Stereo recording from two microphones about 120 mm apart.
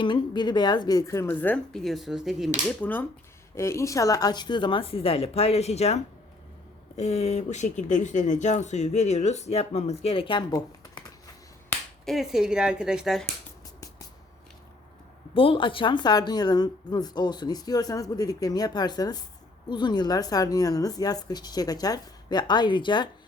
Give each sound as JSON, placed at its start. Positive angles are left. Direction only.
{"t": 0.0, "sound": "speech", "side_deg": 40}
{"t": 1.7, "sound": "speech", "side_deg": 0}
{"t": 2.6, "sound": "speech", "side_deg": 15}
{"t": 3.5, "sound": "speech", "side_deg": 25}
{"t": 12.0, "sound": "speech", "side_deg": 0}
{"t": 15.4, "sound": "speech", "side_deg": 45}